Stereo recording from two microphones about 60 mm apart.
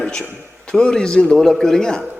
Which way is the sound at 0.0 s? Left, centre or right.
Centre.